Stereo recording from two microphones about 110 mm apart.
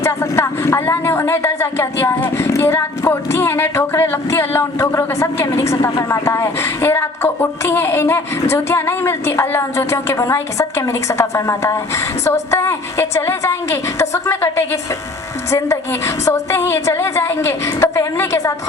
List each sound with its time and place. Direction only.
0.0 s a woman's voice: 25° left (ahead or behind)